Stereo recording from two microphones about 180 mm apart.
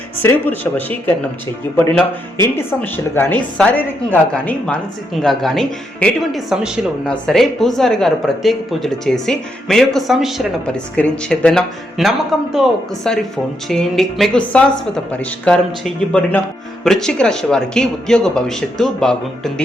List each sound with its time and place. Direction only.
0.2 s speech: 10° left (ahead or behind)
2.6 s a woman's voice: 10° left (ahead or behind)